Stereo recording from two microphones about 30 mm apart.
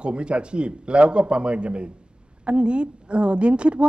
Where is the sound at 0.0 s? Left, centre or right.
Right.